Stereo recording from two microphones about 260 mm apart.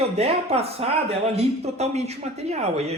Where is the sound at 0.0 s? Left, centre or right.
Right.